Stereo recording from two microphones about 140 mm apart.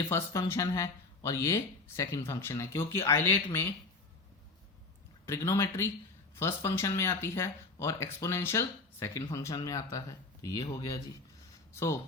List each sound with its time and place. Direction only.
0.1 s speech: 20° left (ahead or behind)
5.2 s speech: 20° left (ahead or behind)